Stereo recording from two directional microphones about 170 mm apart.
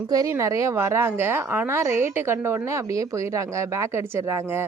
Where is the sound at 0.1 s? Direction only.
20° right (ahead or behind).